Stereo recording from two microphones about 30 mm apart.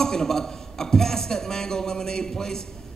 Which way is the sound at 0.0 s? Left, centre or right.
Centre.